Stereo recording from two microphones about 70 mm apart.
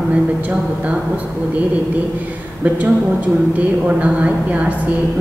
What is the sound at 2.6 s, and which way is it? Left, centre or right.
A woman's voice, right.